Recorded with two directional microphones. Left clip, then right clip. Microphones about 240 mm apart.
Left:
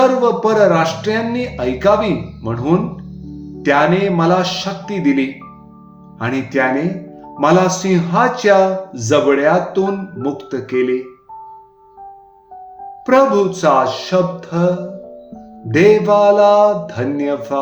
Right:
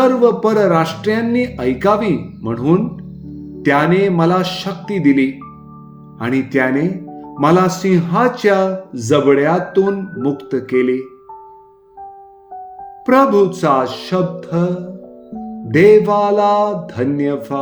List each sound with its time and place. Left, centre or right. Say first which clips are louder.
0.0 s a man's voice: even; right
13.1 s a man's voice: even; right